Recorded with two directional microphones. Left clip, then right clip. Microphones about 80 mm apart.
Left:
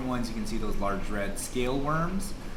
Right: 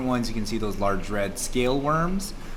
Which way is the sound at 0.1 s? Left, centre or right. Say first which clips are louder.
Right 6 dB; right.